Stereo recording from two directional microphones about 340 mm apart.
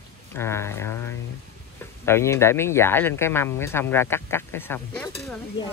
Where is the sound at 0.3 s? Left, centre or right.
Centre.